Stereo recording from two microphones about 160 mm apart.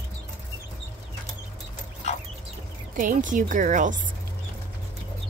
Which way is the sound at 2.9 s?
55° right (ahead or behind).